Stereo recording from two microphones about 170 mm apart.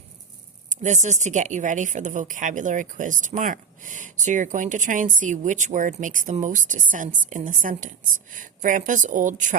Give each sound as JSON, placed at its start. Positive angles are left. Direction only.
{"t": 0.7, "sound": "a woman's voice", "side_deg": -45}